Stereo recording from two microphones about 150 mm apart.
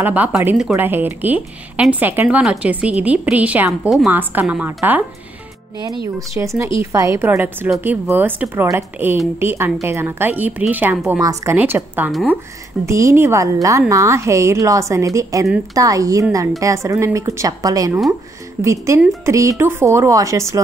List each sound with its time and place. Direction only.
0.0 s speech: 10° right (ahead or behind)
6.1 s a woman's voice: 20° right (ahead or behind)
11.1 s a woman's voice: 25° right (ahead or behind)